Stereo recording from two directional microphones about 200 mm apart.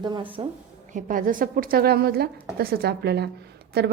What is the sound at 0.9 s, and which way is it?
A woman's voice, 45° right (ahead or behind).